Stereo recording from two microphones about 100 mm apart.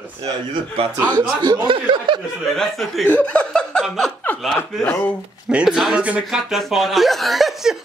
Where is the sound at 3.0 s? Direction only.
15° left (ahead or behind).